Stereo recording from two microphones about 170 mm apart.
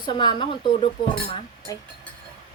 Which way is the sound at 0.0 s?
25° left (ahead or behind).